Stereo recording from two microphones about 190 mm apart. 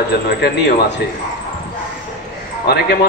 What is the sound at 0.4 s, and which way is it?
Speech, 65° left (ahead or behind).